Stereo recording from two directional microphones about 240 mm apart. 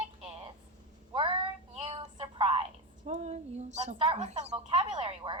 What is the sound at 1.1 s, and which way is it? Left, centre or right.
Child singing, right.